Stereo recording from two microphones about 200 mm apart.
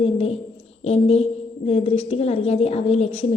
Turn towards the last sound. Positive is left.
turn(degrees=30)  # may be behind; listen again after turning